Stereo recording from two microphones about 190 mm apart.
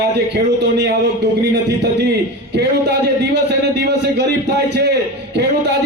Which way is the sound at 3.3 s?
60° right (ahead or behind).